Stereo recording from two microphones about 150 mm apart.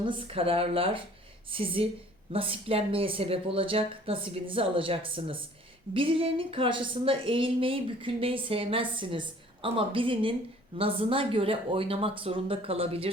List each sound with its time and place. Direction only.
0.0 s a woman's voice: 35° right (ahead or behind)